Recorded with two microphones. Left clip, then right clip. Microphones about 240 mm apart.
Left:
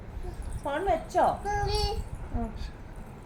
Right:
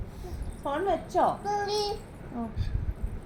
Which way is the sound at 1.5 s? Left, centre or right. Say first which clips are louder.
Right 1 dB; centre.